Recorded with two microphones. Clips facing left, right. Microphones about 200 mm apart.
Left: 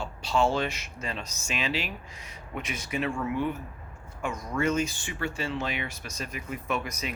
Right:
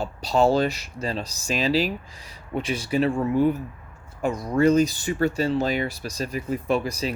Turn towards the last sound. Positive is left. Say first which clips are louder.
# right 8 dB
turn(degrees=-35)  # may be behind; listen again after turning